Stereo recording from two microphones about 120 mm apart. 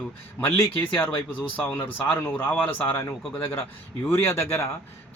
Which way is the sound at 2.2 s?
15° left (ahead or behind).